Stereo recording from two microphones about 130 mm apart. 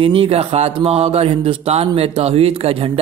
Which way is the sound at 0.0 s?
45° right (ahead or behind).